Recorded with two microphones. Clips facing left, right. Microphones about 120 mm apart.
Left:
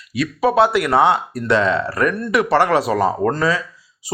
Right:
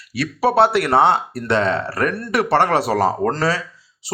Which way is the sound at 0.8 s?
30° right (ahead or behind).